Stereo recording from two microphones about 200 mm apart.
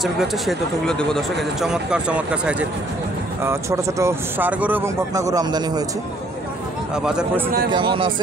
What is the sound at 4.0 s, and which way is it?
Speech, 10° right (ahead or behind).